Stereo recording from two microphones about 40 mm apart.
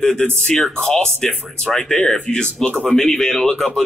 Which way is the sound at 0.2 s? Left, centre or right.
Centre.